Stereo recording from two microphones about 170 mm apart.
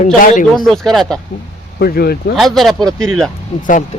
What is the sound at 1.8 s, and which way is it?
Speech, 65° left (ahead or behind).